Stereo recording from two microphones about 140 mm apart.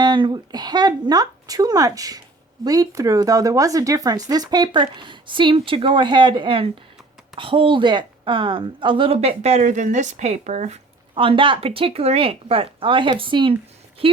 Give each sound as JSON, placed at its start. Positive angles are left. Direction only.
{"t": 0.0, "sound": "a woman's voice", "side_deg": -30}
{"t": 11.1, "sound": "speech", "side_deg": -40}